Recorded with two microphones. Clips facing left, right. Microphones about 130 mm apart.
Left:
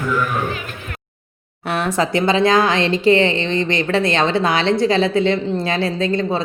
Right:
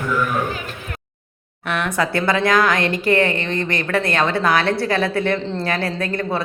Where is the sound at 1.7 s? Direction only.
35° left (ahead or behind).